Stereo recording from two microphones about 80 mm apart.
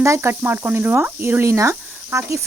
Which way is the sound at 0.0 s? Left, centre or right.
Right.